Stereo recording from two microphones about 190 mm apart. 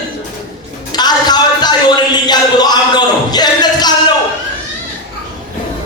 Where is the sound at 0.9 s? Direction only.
20° left (ahead or behind).